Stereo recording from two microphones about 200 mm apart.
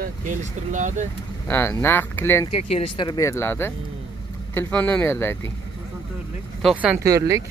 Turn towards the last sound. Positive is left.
turn(degrees=-15)  # may be behind; listen again after turning